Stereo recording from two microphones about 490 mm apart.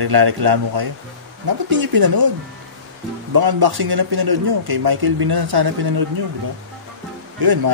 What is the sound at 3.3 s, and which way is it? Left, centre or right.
Speech, right.